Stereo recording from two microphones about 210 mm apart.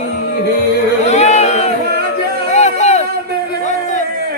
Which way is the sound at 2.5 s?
35° left (ahead or behind).